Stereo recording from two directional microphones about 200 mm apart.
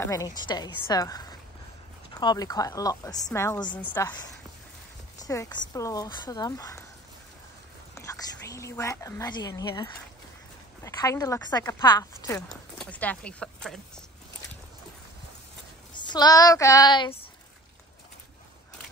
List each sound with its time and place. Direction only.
0.0 s speech: 15° left (ahead or behind)
7.9 s speech: 15° left (ahead or behind)
12.4 s speech: 5° left (ahead or behind)
15.9 s speech: 20° left (ahead or behind)